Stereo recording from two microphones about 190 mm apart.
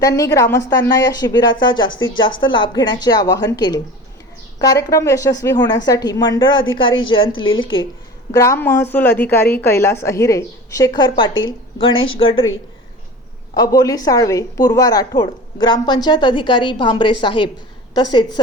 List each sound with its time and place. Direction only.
0.0 s a woman's voice: 15° left (ahead or behind)
8.3 s a woman's voice: 15° left (ahead or behind)
13.6 s a woman's voice: 20° left (ahead or behind)